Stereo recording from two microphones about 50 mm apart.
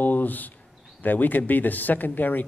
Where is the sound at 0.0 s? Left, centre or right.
Left.